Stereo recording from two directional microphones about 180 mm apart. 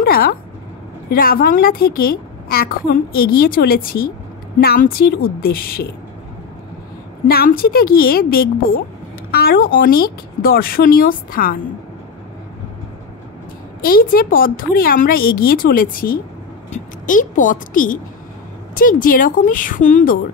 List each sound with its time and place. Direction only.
0.0 s a sound: 55° left (ahead or behind)
1.1 s a woman's voice: 55° left (ahead or behind)
7.2 s a woman's voice: 55° left (ahead or behind)
13.8 s a woman's voice: 55° left (ahead or behind)